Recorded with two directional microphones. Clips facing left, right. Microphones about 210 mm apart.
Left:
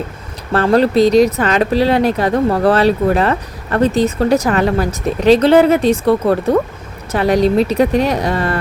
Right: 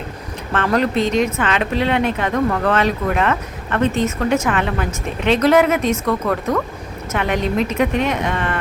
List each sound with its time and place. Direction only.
0.5 s speech: 35° left (ahead or behind)